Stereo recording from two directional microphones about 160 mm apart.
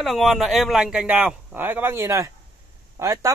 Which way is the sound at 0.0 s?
Centre (ahead or behind).